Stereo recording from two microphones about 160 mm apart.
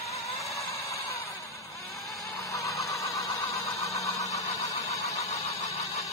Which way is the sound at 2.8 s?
20° left (ahead or behind).